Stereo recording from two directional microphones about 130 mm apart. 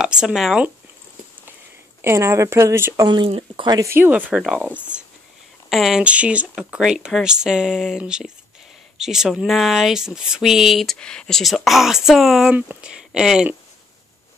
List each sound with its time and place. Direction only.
0.0 s speech: 5° right (ahead or behind)
2.0 s speech: 20° right (ahead or behind)
3.3 s speech: 40° right (ahead or behind)
3.9 s speech: 15° right (ahead or behind)